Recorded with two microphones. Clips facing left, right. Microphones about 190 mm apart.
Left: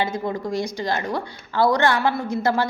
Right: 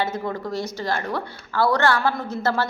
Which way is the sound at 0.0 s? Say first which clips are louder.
Left 1 dB; 15° left (ahead or behind).